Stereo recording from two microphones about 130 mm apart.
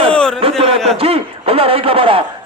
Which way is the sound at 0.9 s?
50° right (ahead or behind).